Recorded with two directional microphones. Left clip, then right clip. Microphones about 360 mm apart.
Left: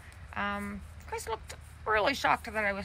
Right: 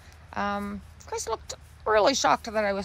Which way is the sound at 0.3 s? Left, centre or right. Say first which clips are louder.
Right 5 dB; centre.